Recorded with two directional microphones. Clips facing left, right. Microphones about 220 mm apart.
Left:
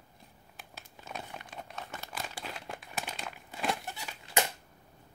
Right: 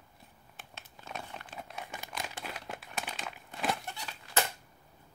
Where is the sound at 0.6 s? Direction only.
Centre (ahead or behind).